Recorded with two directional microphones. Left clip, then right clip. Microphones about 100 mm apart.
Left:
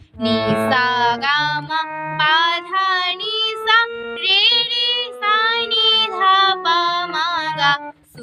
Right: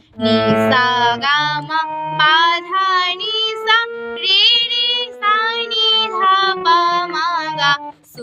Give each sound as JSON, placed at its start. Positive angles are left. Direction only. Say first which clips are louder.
{"t": 0.7, "sound": "child singing", "louder": "even", "side_deg": -40}